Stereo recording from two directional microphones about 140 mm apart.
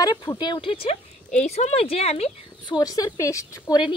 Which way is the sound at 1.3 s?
55° left (ahead or behind).